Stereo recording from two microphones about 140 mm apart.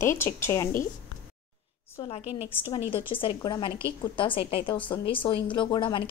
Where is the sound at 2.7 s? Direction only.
40° left (ahead or behind).